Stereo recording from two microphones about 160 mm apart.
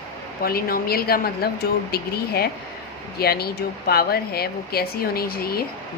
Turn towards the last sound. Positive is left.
turn(degrees=70)  # may be behind; listen again after turning